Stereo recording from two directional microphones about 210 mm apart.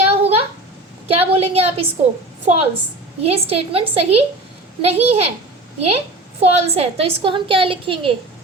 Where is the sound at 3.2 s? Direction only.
30° right (ahead or behind).